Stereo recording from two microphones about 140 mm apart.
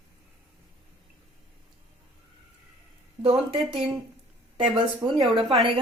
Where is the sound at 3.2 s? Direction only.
45° right (ahead or behind).